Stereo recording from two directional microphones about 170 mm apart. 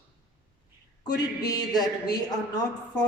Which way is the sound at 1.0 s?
25° left (ahead or behind).